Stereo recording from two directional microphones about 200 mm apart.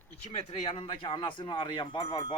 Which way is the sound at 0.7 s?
25° left (ahead or behind).